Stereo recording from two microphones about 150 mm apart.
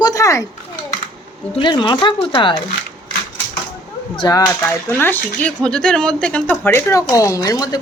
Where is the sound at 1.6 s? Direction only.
30° left (ahead or behind).